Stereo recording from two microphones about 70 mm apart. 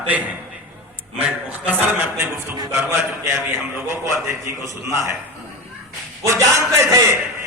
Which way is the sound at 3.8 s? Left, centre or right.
Right.